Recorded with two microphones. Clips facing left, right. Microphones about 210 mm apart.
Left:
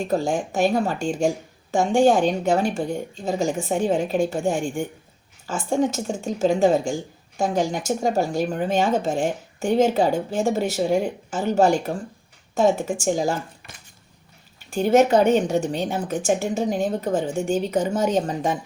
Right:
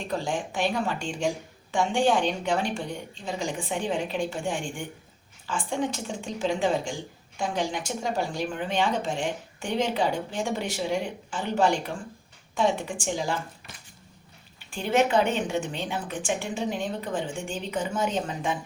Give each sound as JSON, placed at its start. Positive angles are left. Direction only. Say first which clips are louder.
{"t": 0.0, "sound": "speech", "louder": "left 7 dB", "side_deg": 45}
{"t": 14.7, "sound": "a woman's voice", "louder": "left 7 dB", "side_deg": 40}